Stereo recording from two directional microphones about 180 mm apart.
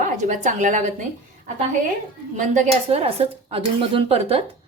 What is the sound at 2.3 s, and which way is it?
Speech, 45° right (ahead or behind).